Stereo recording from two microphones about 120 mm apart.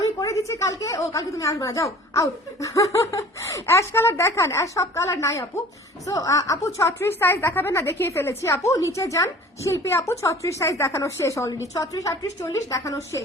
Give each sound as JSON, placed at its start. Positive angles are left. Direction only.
{"t": 0.0, "sound": "a woman's voice", "side_deg": 25}